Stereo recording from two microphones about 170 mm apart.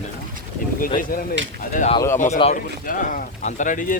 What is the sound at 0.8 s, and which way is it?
Speech, 55° left (ahead or behind).